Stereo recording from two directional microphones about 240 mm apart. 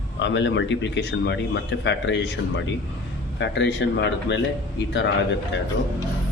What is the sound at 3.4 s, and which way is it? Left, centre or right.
Speech, left.